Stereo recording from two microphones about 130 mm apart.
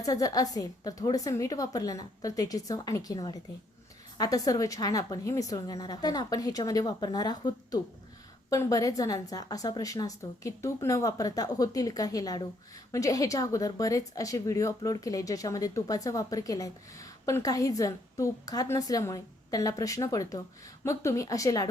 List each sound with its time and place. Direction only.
0.0 s a woman's voice: 30° left (ahead or behind)